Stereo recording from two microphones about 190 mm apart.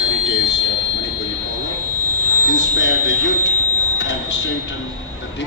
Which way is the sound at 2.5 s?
75° left (ahead or behind).